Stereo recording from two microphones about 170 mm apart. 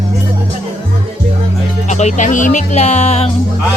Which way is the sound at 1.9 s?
45° left (ahead or behind).